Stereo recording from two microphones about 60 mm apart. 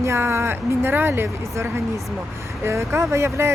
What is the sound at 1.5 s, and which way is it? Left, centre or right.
Speech, right.